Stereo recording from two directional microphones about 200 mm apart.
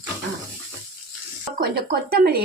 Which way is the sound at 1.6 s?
50° right (ahead or behind).